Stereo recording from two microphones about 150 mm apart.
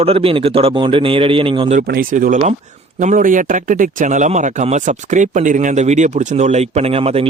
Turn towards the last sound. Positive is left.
turn(degrees=-40)  # may be behind; listen again after turning